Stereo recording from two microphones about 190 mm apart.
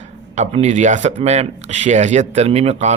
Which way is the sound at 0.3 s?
35° right (ahead or behind).